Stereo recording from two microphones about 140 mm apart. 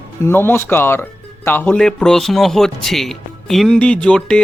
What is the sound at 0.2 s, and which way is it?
Speech, 15° left (ahead or behind).